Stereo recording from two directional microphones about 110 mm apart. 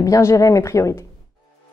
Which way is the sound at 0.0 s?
30° left (ahead or behind).